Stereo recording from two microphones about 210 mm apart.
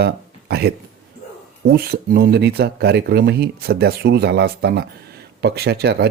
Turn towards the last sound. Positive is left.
turn(degrees=-50)  # may be behind; listen again after turning